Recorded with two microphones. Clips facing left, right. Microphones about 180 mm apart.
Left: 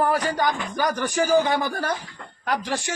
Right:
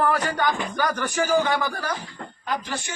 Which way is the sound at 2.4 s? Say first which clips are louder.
Left 4 dB; 80° left.